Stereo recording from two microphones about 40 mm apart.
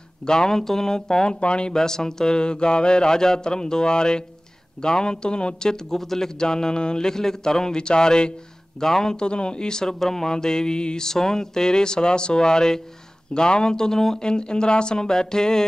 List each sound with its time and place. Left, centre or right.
0.3 s speech: centre
9.1 s speech: left